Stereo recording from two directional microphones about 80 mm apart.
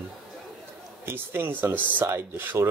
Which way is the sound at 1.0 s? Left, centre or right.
Right.